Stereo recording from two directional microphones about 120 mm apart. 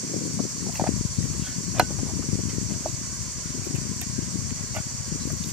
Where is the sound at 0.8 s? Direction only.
5° right (ahead or behind).